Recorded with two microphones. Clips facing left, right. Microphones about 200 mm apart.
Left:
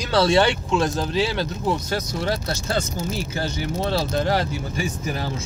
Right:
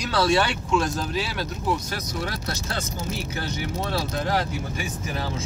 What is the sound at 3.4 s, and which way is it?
Speech, 30° left (ahead or behind).